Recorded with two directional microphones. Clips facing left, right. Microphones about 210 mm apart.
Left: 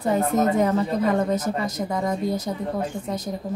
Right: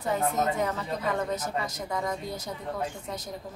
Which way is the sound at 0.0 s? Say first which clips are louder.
Left 6 dB; 35° left (ahead or behind).